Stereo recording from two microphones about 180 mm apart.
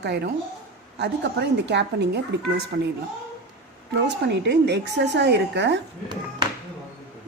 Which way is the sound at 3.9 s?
70° right (ahead or behind).